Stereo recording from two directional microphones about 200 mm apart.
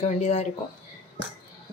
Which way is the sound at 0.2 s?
35° left (ahead or behind).